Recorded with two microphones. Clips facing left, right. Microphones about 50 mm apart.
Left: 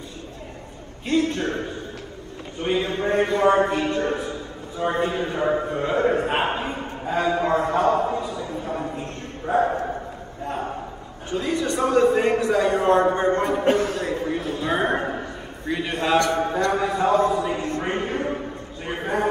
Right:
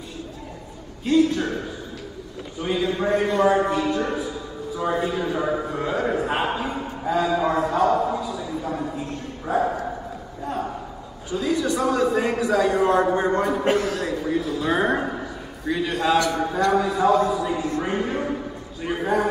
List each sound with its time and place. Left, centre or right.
1.0 s a man's voice: left
2.6 s a man's voice: left
9.5 s a man's voice: left
11.2 s a man's voice: left
18.8 s a sound: left